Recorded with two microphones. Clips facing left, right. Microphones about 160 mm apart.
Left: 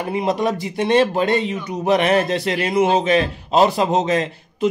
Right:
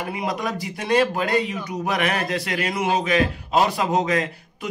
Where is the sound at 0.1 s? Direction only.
25° left (ahead or behind).